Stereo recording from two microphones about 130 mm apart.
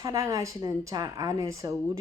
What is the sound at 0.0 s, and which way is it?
Speech, 25° right (ahead or behind).